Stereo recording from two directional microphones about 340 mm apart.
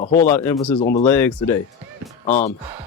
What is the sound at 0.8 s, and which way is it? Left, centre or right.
Speech, centre.